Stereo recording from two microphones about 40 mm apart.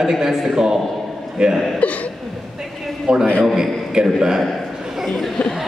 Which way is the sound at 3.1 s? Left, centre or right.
Right.